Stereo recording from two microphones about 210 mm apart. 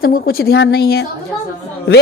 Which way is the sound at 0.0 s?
45° left (ahead or behind).